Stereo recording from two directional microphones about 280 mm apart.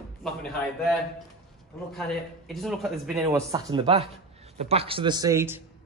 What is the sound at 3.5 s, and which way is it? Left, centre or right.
Speech, centre.